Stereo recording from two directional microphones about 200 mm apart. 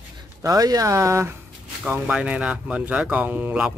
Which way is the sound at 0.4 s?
15° right (ahead or behind).